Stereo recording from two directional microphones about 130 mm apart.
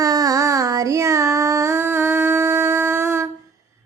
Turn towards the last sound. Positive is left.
turn(degrees=-20)  # may be behind; listen again after turning